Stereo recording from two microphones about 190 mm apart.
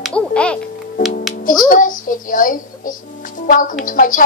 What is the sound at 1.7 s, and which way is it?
A woman's voice, 45° left (ahead or behind).